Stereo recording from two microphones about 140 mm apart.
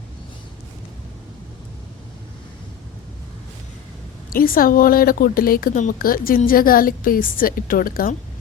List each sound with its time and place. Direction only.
4.3 s speech: 90° left